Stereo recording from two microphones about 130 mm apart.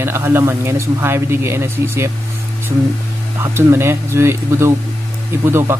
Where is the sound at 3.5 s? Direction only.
15° right (ahead or behind).